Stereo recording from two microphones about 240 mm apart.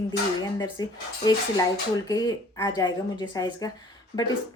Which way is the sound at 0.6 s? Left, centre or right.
Centre.